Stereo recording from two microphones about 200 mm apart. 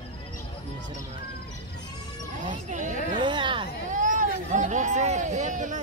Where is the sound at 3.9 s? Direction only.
40° right (ahead or behind).